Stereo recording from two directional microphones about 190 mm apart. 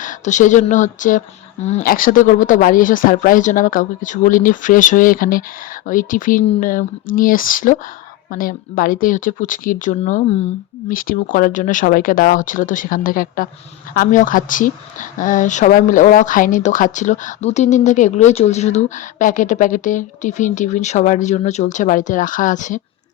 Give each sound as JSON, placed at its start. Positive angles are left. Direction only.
{"t": 0.0, "sound": "speech", "side_deg": 40}